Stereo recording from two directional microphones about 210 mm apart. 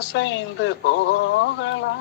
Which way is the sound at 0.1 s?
60° left (ahead or behind).